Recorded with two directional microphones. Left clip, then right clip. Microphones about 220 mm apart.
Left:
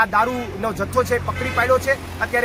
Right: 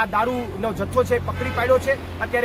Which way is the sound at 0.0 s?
Centre (ahead or behind).